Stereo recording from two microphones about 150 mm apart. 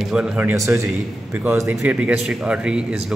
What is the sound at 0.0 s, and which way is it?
Speech, 5° right (ahead or behind).